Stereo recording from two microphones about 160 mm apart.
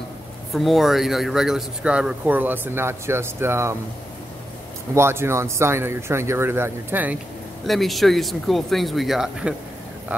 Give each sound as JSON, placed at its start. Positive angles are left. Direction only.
{"t": 0.5, "sound": "a man's voice", "side_deg": 0}
{"t": 4.9, "sound": "a man's voice", "side_deg": -15}
{"t": 7.6, "sound": "speech", "side_deg": 0}